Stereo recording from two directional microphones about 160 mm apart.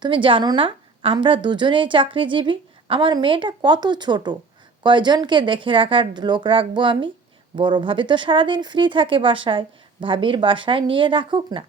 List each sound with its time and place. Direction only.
0.0 s a woman's voice: 30° right (ahead or behind)